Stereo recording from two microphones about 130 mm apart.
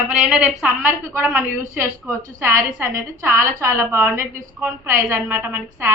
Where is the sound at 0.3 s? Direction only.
10° right (ahead or behind).